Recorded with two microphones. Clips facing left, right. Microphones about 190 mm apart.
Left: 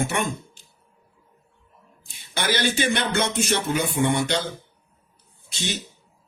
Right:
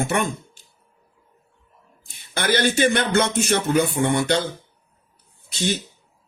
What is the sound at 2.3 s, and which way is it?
A man's voice, 50° right (ahead or behind).